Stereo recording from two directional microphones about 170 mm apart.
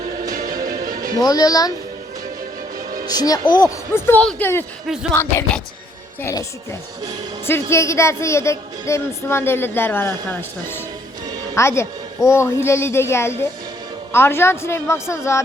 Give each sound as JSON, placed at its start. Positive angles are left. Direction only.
{"t": 0.3, "sound": "music", "side_deg": -55}
{"t": 1.2, "sound": "speech", "side_deg": 20}
{"t": 3.1, "sound": "a woman's voice", "side_deg": 20}
{"t": 7.4, "sound": "a woman's voice", "side_deg": 15}